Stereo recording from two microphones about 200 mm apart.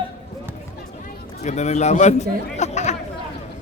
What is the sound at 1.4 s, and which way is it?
A man's voice, 35° left (ahead or behind).